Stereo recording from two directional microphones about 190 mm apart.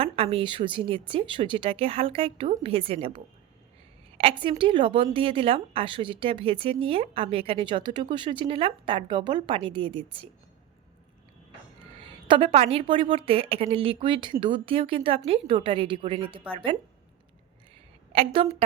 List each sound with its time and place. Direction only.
0.0 s speech: 30° right (ahead or behind)
4.2 s speech: 30° right (ahead or behind)
11.9 s speech: 25° right (ahead or behind)
18.1 s a woman's voice: 30° right (ahead or behind)